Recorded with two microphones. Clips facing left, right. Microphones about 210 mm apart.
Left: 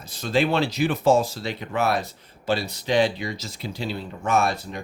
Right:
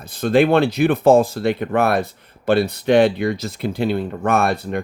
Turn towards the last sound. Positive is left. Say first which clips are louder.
# right 4 dB
turn(degrees=-60)  # may be behind; listen again after turning